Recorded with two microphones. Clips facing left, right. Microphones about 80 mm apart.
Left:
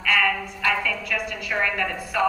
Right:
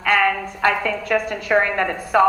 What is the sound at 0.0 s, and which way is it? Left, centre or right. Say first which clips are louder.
A woman's voice: right 4 dB; right.